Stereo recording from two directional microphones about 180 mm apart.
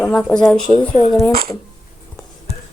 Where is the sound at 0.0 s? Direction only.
5° left (ahead or behind).